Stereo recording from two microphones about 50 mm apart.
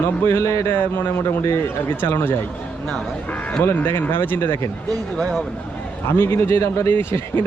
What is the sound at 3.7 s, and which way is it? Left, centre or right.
Speech, left.